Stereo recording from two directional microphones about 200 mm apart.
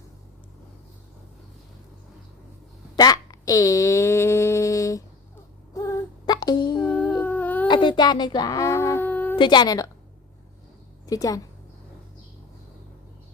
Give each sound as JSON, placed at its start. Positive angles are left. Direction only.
{"t": 2.9, "sound": "a sound", "side_deg": 20}
{"t": 5.7, "sound": "female singing", "side_deg": 15}
{"t": 6.8, "sound": "humming", "side_deg": 5}
{"t": 7.7, "sound": "a sound", "side_deg": 25}
{"t": 9.4, "sound": "a woman's voice", "side_deg": 20}
{"t": 11.0, "sound": "a woman's voice", "side_deg": 15}